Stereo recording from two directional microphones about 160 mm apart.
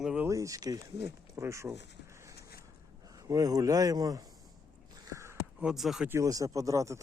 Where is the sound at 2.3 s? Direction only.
80° left.